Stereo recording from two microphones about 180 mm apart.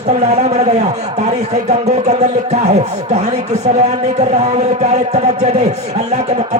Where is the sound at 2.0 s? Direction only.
40° right (ahead or behind).